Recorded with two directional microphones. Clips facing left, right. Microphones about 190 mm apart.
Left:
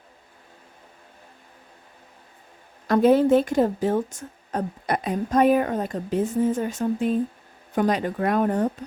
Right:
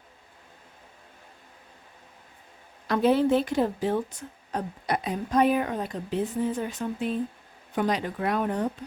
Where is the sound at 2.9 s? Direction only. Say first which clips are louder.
Left 5 dB; 45° left (ahead or behind).